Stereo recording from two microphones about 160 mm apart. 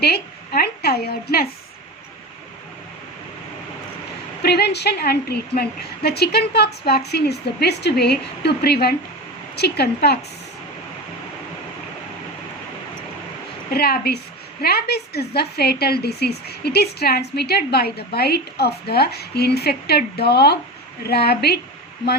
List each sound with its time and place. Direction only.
0.0 s a woman's voice: 80° left
4.4 s a woman's voice: 90° left
13.7 s a woman's voice: 75° left (ahead or behind)